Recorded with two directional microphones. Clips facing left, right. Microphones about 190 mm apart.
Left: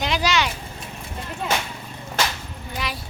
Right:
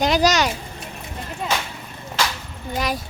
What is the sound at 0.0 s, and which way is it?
Speech, 40° right (ahead or behind).